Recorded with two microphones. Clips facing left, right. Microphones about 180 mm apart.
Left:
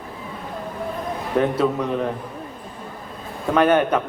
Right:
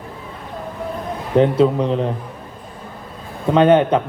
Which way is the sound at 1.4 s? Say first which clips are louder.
Right 6 dB; 25° right (ahead or behind).